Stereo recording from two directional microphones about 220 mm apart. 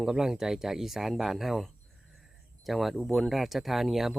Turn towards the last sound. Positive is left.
turn(degrees=0)  # may be behind; listen again after turning